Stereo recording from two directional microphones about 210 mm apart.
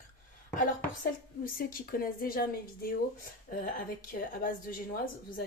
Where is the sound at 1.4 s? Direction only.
45° left (ahead or behind).